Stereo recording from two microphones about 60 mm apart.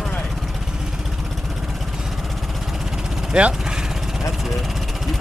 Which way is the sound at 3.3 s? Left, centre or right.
Centre.